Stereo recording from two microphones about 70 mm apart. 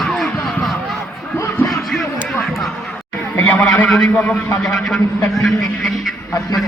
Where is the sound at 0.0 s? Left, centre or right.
Centre.